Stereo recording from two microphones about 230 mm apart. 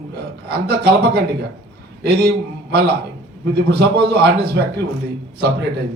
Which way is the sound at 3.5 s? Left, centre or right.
Right.